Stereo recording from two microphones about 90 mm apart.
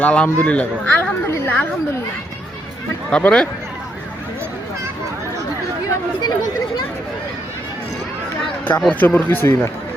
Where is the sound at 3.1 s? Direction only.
10° left (ahead or behind).